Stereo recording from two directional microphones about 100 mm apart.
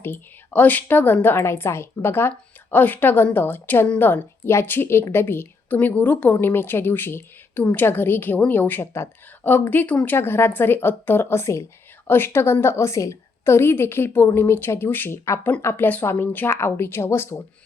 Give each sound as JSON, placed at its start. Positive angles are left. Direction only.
{"t": 0.0, "sound": "a woman's voice", "side_deg": 20}